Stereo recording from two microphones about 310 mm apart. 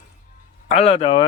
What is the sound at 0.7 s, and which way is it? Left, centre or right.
Speech, centre.